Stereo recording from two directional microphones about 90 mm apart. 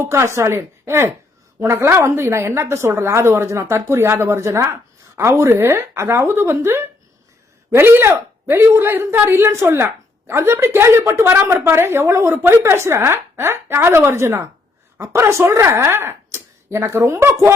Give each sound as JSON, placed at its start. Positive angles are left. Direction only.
{"t": 0.0, "sound": "a woman's voice", "side_deg": -30}